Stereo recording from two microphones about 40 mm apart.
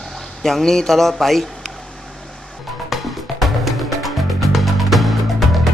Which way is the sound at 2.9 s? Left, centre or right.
Centre.